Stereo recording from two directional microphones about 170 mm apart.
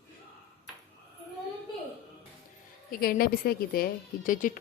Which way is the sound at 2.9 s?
60° left (ahead or behind).